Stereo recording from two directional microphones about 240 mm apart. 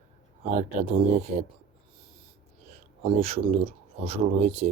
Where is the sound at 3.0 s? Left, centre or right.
Right.